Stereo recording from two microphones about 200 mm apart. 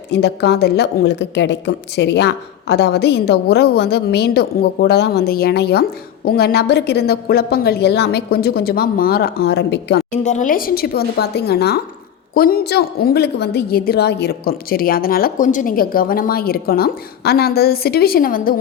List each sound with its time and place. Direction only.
0.1 s a woman's voice: 55° left (ahead or behind)
10.1 s a woman's voice: 35° left (ahead or behind)